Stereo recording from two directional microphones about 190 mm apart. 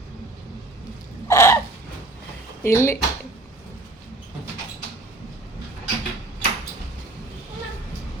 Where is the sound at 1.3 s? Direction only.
15° left (ahead or behind).